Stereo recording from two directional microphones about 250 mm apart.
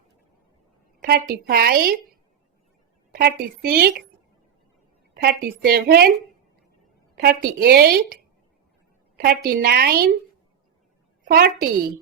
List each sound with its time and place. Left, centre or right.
1.0 s a woman's voice: right
3.1 s a woman's voice: right
5.1 s a woman's voice: right
7.2 s a woman's voice: right
11.3 s a woman's voice: right